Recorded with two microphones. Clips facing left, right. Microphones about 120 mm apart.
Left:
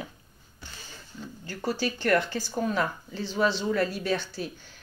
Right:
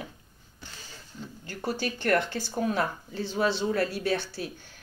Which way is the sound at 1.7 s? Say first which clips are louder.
Left 1 dB; 50° right (ahead or behind).